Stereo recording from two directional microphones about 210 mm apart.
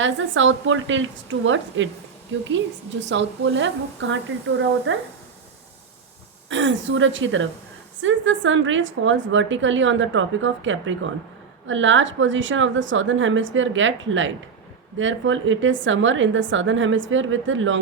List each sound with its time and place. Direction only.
0.0 s a woman's voice: 65° right (ahead or behind)
6.5 s a woman's voice: 60° right (ahead or behind)